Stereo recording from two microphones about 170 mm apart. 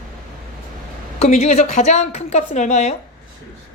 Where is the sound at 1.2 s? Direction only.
40° left (ahead or behind).